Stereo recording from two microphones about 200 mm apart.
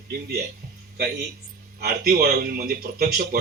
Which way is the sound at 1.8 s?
50° right (ahead or behind).